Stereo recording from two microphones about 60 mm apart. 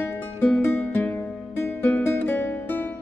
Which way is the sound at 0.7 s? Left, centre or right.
Left.